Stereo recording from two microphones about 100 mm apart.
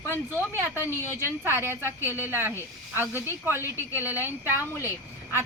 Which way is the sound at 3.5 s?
30° left (ahead or behind).